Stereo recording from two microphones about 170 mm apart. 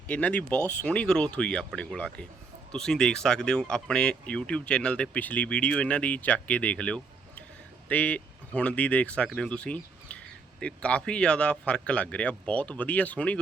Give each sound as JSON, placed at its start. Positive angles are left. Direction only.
{"t": 0.1, "sound": "speech", "side_deg": 10}